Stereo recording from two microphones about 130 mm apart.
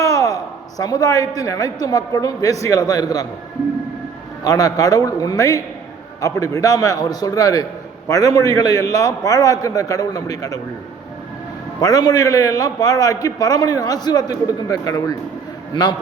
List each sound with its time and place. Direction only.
0.0 s a sound: 25° left (ahead or behind)
0.8 s a man's voice: 30° left (ahead or behind)
4.4 s a man's voice: 30° left (ahead or behind)
11.8 s a man's voice: 30° left (ahead or behind)